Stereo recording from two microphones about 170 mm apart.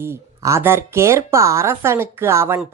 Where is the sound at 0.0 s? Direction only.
15° right (ahead or behind).